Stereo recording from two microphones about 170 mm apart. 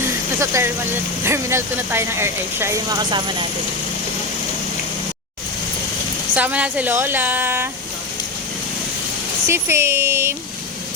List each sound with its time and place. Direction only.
0.3 s speech: 15° right (ahead or behind)
6.3 s speech: 10° right (ahead or behind)
9.5 s speech: 15° right (ahead or behind)